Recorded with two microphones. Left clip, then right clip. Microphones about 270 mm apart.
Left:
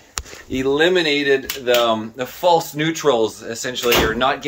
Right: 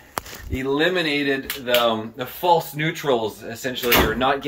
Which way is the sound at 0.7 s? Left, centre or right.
Centre.